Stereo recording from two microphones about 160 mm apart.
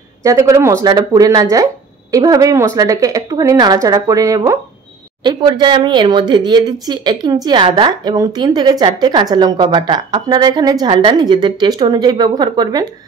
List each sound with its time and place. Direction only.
0.2 s a woman's voice: 20° right (ahead or behind)